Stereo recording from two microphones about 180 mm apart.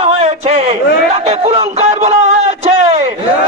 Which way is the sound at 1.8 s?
35° right (ahead or behind).